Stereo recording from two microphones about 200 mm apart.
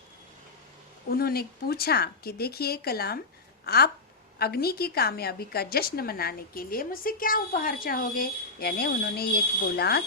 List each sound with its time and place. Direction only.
1.1 s a woman's voice: 50° left (ahead or behind)